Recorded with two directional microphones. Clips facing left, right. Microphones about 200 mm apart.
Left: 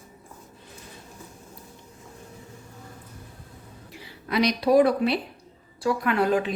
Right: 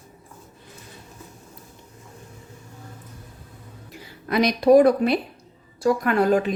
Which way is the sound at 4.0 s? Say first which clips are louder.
Right 2 dB; 50° right (ahead or behind).